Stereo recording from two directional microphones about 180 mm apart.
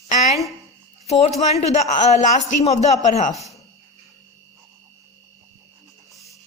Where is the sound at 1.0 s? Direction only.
35° left (ahead or behind).